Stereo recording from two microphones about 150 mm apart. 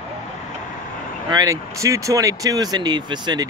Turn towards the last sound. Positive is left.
turn(degrees=-30)  # may be behind; listen again after turning